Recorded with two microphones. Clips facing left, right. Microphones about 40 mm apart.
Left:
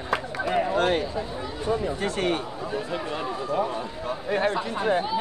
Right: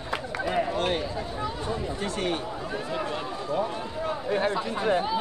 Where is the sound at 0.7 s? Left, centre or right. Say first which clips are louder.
Left 4 dB; left.